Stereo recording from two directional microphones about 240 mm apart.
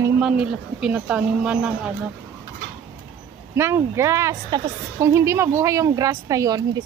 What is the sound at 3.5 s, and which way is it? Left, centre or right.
A woman's voice, centre.